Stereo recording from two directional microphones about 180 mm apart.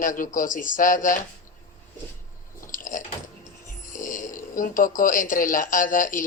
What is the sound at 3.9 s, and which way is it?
Speech, 45° left (ahead or behind).